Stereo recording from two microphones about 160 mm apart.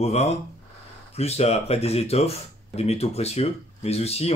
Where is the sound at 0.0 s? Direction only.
40° left (ahead or behind).